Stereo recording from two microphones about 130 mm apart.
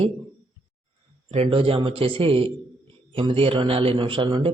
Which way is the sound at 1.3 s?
50° right (ahead or behind).